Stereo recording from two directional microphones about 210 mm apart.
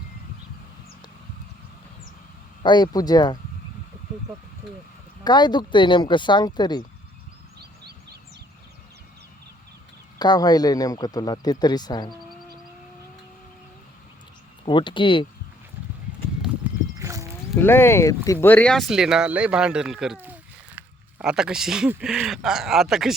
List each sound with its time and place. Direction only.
2.6 s speech: 20° left (ahead or behind)
5.2 s speech: 20° left (ahead or behind)
10.2 s speech: 20° left (ahead or behind)
14.6 s speech: 25° left (ahead or behind)
16.4 s horse: 10° right (ahead or behind)
17.6 s speech: 10° left (ahead or behind)